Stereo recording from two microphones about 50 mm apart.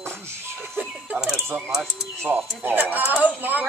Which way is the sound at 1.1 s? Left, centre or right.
Centre.